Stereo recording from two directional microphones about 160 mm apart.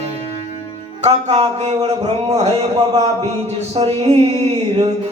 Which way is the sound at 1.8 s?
40° right (ahead or behind).